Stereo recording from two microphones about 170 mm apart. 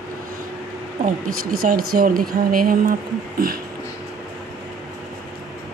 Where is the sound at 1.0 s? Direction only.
60° right (ahead or behind).